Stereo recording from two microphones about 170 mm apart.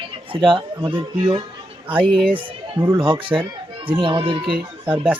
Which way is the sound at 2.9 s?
30° right (ahead or behind).